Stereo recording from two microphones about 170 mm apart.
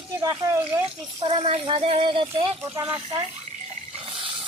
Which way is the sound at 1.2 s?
35° right (ahead or behind).